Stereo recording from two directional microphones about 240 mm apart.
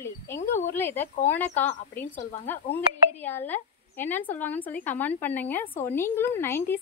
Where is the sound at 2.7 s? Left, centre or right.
Centre.